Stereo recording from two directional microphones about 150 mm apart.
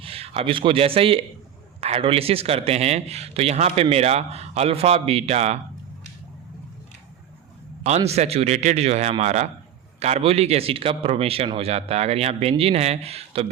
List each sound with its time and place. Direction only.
0.0 s speech: 40° right (ahead or behind)
7.9 s speech: 45° right (ahead or behind)